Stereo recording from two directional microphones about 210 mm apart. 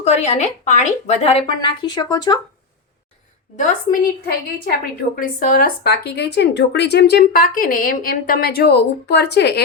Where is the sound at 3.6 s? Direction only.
40° left (ahead or behind).